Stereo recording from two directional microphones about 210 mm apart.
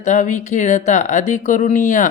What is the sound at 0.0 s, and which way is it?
A man's voice, 35° left (ahead or behind).